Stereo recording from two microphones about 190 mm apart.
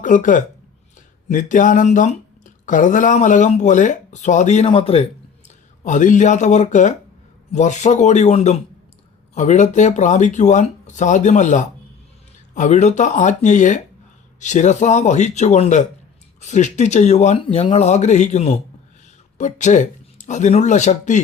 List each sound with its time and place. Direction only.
0.0 s speech: 45° left (ahead or behind)
5.8 s speech: 40° left (ahead or behind)